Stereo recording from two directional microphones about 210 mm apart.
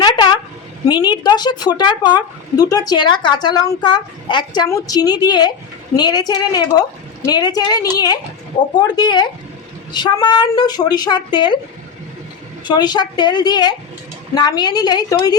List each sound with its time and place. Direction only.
0.0 s a sound: 20° left (ahead or behind)
0.9 s a woman's voice: 20° left (ahead or behind)
12.6 s a woman's voice: 20° left (ahead or behind)